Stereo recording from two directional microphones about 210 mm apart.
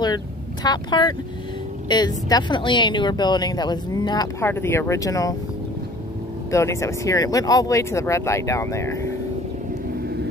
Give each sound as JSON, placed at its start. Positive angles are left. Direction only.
{"t": 0.7, "sound": "speech", "side_deg": 20}
{"t": 6.5, "sound": "speech", "side_deg": 15}